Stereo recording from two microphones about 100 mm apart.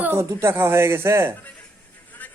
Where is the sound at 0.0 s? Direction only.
25° right (ahead or behind).